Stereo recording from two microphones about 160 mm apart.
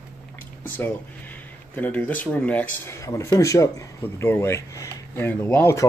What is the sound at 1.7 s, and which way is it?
Speech, 10° left (ahead or behind).